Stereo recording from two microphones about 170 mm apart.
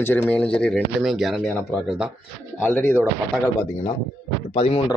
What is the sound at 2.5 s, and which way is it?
Speech, 10° left (ahead or behind).